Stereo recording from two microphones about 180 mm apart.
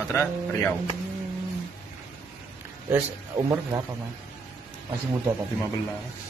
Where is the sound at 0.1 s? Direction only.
15° left (ahead or behind).